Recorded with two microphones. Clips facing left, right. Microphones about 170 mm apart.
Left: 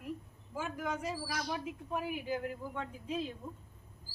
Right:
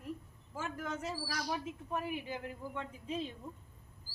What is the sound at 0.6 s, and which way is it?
A man's voice, 10° left (ahead or behind).